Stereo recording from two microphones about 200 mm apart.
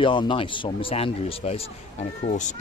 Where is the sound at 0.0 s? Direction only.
25° left (ahead or behind).